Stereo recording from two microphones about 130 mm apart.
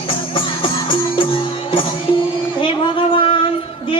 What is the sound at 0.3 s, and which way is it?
Music, 40° left (ahead or behind).